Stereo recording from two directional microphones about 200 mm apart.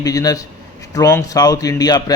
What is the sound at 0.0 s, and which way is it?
A man's voice, 20° left (ahead or behind).